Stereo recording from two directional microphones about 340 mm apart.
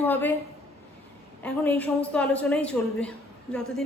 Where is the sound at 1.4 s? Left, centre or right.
Centre.